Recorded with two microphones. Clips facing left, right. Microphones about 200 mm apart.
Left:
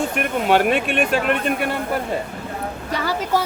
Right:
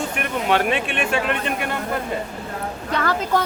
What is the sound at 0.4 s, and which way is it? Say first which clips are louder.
Speech: left 3 dB; 45° left (ahead or behind).